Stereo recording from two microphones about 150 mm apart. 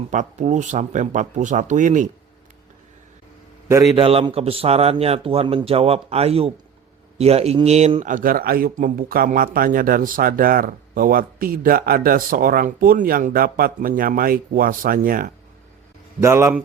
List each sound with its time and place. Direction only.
0.1 s speech: 55° right (ahead or behind)
3.9 s a man's voice: 35° right (ahead or behind)
8.0 s speech: 65° right (ahead or behind)
16.2 s a man's voice: 15° right (ahead or behind)